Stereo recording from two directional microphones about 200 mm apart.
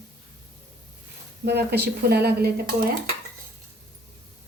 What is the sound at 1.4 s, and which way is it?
Speech, 55° right (ahead or behind).